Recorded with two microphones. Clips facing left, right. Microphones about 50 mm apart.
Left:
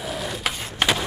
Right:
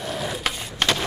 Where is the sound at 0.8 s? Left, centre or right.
Centre.